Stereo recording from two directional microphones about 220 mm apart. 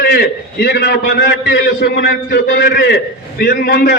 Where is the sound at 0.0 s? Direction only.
45° left (ahead or behind).